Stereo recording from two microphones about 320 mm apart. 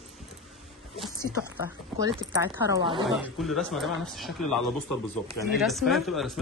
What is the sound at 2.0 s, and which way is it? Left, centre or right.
Speech, centre.